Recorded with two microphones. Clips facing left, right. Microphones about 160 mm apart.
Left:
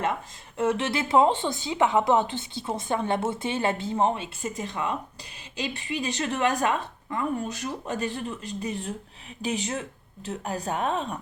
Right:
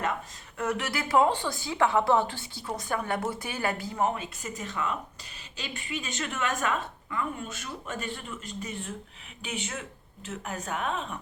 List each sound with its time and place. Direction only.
0.5 s speech: 25° left (ahead or behind)